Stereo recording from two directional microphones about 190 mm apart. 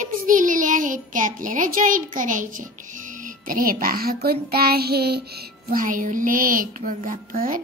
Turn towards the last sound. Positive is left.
turn(degrees=-45)  # may be behind; listen again after turning